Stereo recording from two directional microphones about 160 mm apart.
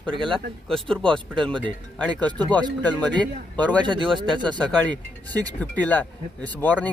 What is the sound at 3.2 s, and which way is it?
Speech, 10° left (ahead or behind).